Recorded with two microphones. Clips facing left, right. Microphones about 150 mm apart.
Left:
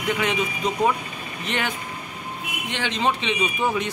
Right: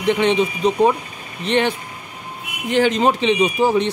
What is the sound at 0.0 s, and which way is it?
Speech, 30° right (ahead or behind).